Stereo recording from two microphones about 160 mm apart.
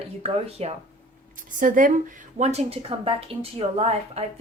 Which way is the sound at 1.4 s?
55° right (ahead or behind).